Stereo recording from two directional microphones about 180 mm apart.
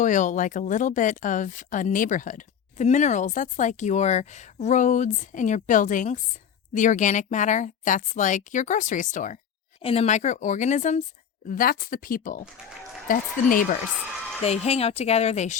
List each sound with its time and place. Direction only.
0.0 s speech: 45° left (ahead or behind)
11.4 s speech: 50° left (ahead or behind)
14.4 s speech: 35° left (ahead or behind)